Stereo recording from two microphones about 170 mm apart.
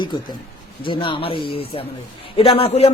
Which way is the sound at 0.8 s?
30° left (ahead or behind).